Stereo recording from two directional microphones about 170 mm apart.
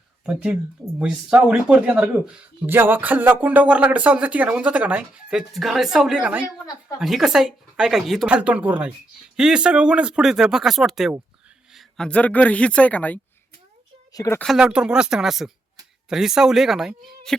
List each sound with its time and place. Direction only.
0.3 s speech: 5° right (ahead or behind)
14.1 s speech: 20° left (ahead or behind)
14.3 s speech: centre (ahead or behind)